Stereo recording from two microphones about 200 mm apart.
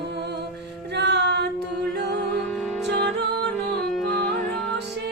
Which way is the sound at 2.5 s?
5° left (ahead or behind).